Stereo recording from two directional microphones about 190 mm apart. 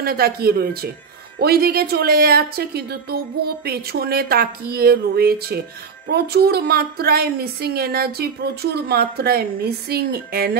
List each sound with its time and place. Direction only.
0.0 s a woman's voice: 55° right (ahead or behind)